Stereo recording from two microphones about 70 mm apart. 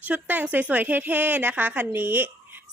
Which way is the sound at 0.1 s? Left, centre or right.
Right.